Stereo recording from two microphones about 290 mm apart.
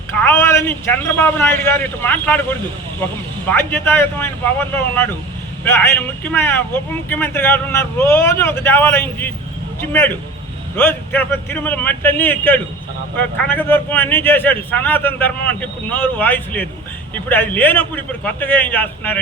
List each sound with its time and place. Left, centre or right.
0.2 s speech: centre